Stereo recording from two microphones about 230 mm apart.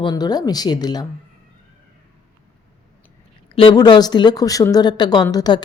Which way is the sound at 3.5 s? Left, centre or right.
Left.